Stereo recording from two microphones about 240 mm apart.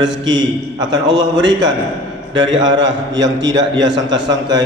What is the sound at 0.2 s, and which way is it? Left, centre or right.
A man's voice, centre.